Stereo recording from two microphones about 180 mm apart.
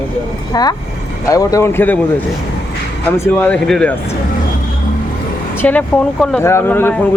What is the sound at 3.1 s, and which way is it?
Speech, 10° left (ahead or behind).